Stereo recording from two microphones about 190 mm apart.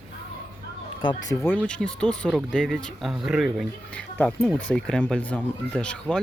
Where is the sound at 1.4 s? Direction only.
5° left (ahead or behind).